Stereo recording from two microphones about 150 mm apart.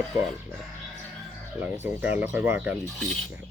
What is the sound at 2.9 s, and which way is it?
Cutlery, 5° left (ahead or behind).